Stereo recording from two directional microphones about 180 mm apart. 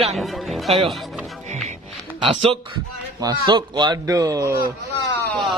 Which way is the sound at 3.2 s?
25° right (ahead or behind).